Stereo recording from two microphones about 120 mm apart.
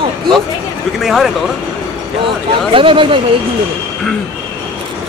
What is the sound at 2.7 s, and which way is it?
Speech, 45° right (ahead or behind).